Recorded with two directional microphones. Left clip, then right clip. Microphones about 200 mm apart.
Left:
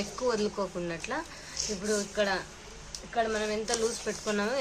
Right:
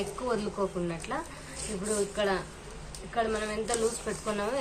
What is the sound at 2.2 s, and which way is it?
A woman's voice, 45° left (ahead or behind).